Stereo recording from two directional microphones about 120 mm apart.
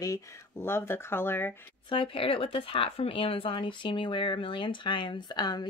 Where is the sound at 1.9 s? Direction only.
50° left (ahead or behind).